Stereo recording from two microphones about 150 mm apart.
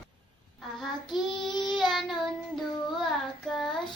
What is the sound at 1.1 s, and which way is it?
Child singing, centre (ahead or behind).